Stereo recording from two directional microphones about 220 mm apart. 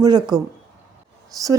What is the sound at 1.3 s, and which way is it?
Speech, 15° right (ahead or behind).